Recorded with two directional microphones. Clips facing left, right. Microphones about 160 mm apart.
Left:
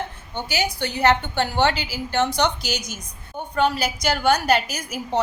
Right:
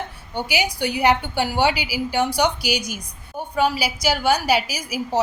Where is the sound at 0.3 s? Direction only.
15° right (ahead or behind).